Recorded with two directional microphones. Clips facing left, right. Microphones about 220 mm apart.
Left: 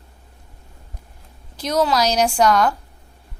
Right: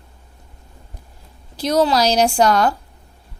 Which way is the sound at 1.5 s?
30° right (ahead or behind).